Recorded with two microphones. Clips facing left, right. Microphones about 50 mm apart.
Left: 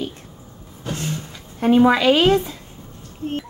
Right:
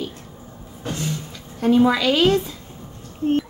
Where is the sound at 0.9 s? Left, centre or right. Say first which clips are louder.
Left 1 dB; left.